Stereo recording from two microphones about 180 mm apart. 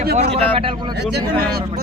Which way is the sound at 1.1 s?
60° right (ahead or behind).